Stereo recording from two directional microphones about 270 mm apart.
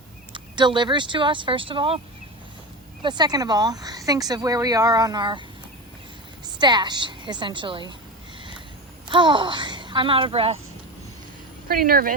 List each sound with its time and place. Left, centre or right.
0.3 s speech: centre
3.0 s speech: centre
6.4 s a woman's voice: centre
9.0 s speech: centre
11.7 s speech: right